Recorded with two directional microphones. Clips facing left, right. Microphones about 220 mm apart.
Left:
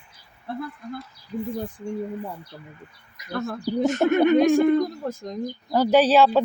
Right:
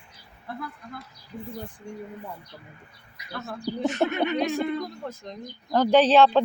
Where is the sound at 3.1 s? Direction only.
45° left (ahead or behind).